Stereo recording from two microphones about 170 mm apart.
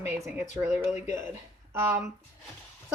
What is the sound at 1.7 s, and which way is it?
Speech, 10° right (ahead or behind).